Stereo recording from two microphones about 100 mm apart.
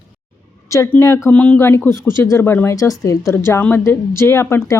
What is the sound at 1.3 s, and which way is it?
Speech, 15° left (ahead or behind).